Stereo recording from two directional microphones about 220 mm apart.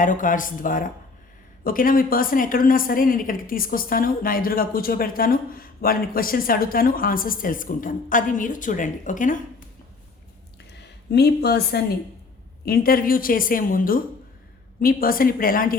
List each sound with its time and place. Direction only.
0.0 s a woman's voice: 35° left (ahead or behind)
10.7 s a woman's voice: 50° left (ahead or behind)